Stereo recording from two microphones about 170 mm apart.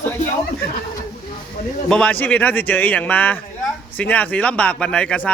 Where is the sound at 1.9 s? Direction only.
5° left (ahead or behind).